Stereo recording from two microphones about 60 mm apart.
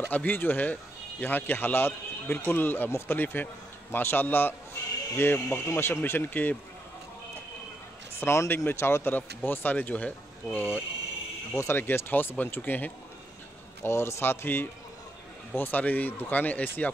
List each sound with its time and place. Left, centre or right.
0.1 s speech: left
8.2 s a man's voice: left
11.5 s speech: left
13.8 s speech: left